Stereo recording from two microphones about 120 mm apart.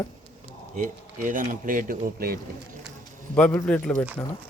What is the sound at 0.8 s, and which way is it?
Speech, 90° right.